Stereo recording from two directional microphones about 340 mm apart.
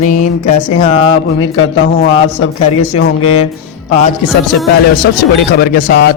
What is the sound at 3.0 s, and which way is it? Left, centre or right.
Speech, left.